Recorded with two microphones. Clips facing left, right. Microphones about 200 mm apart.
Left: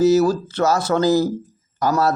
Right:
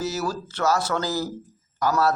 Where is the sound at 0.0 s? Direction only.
20° left (ahead or behind).